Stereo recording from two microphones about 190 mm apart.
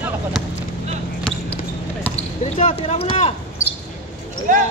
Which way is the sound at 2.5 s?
35° left (ahead or behind).